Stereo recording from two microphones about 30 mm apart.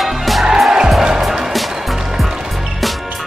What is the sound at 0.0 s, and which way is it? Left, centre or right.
Music, centre.